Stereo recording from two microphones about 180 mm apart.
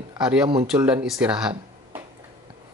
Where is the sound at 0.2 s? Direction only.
5° right (ahead or behind).